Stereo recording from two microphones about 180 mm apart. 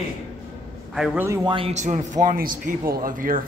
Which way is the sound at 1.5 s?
30° right (ahead or behind).